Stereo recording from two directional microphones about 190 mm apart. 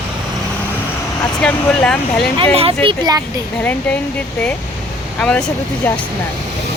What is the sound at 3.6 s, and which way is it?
Speech, 10° left (ahead or behind).